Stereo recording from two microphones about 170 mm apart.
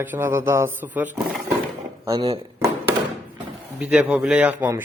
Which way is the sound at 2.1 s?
30° right (ahead or behind).